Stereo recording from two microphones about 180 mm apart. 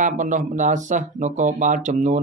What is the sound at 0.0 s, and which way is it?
Speech, 45° right (ahead or behind).